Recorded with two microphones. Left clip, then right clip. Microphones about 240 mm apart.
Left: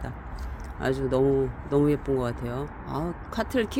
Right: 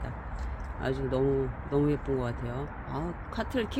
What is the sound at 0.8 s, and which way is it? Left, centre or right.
Speech, left.